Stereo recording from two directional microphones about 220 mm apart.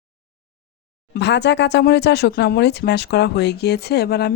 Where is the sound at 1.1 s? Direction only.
50° left (ahead or behind).